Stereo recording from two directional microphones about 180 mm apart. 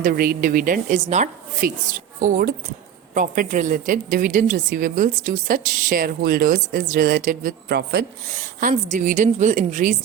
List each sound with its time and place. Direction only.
0.0 s a woman's voice: 55° right (ahead or behind)
8.7 s a woman's voice: 45° right (ahead or behind)